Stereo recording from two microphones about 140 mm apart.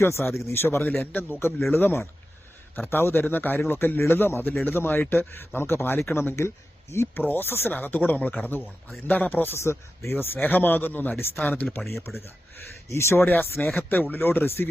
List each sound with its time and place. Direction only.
0.0 s speech: 20° left (ahead or behind)